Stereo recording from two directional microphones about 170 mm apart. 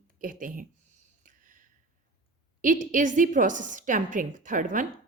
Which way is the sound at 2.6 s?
50° right (ahead or behind).